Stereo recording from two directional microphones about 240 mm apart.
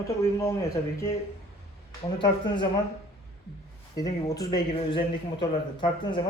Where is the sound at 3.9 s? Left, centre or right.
Centre.